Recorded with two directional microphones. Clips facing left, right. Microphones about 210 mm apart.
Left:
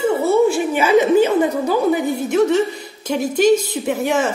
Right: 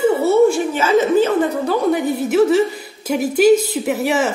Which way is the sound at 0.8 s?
15° left (ahead or behind).